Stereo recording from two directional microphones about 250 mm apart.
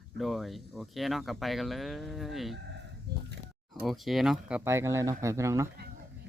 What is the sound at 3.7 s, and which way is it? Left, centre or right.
Speech, centre.